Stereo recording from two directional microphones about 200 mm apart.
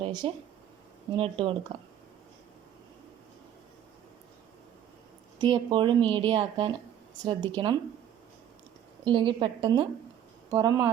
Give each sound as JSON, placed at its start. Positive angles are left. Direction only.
{"t": 0.0, "sound": "a woman's voice", "side_deg": -25}
{"t": 5.4, "sound": "a woman's voice", "side_deg": -20}
{"t": 9.0, "sound": "a woman's voice", "side_deg": -25}